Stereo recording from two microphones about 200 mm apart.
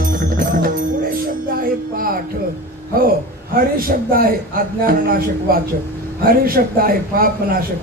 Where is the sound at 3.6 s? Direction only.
45° right (ahead or behind).